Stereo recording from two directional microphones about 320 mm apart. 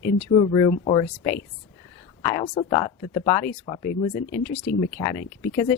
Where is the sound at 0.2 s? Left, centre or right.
Centre.